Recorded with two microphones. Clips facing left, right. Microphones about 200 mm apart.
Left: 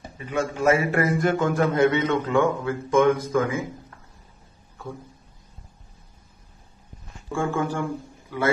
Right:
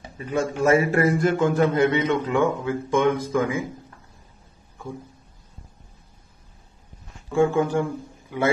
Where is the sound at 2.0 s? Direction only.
15° right (ahead or behind).